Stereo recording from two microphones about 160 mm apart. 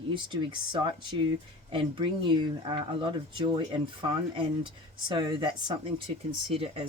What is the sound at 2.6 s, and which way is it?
Speech, 30° right (ahead or behind).